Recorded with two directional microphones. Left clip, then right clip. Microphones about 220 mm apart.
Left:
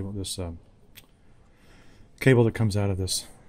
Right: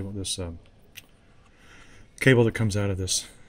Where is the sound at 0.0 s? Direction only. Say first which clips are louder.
Right 2 dB; centre (ahead or behind).